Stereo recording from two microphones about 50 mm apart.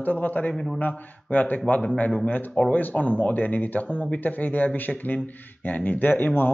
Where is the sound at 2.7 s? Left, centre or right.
Left.